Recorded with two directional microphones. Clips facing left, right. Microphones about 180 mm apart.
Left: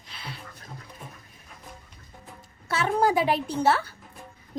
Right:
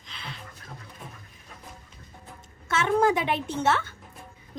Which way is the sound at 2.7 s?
35° left (ahead or behind).